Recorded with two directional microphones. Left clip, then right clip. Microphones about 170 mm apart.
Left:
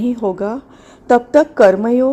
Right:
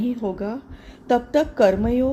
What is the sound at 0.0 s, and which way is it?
A woman's voice, 35° left (ahead or behind).